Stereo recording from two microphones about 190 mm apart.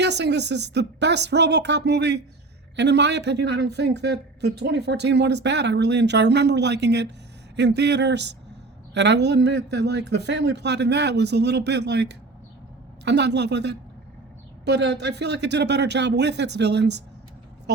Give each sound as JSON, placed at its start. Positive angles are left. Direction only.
{"t": 0.0, "sound": "speech", "side_deg": -65}